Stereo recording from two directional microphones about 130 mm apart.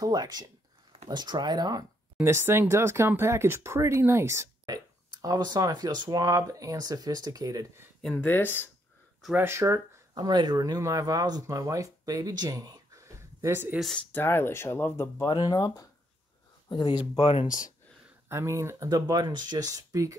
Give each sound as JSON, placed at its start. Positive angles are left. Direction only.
{"t": 0.0, "sound": "speech", "side_deg": -30}
{"t": 2.2, "sound": "speech", "side_deg": -20}
{"t": 8.0, "sound": "speech", "side_deg": 10}
{"t": 9.4, "sound": "speech", "side_deg": -20}
{"t": 13.7, "sound": "speech", "side_deg": 0}
{"t": 14.1, "sound": "speech", "side_deg": 15}
{"t": 15.2, "sound": "speech", "side_deg": 35}
{"t": 18.3, "sound": "speech", "side_deg": -20}